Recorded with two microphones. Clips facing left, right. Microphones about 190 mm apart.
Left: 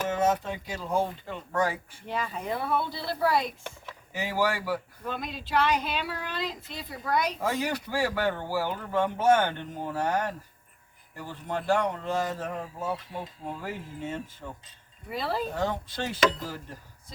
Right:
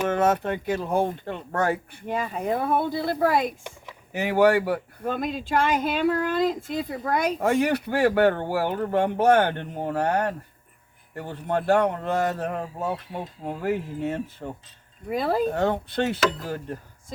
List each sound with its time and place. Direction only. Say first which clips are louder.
0.1 s speech: right 4 dB; 60° right (ahead or behind)
4.1 s speech: right 9 dB; 60° right (ahead or behind)
15.1 s speech: right 7 dB; 50° right (ahead or behind)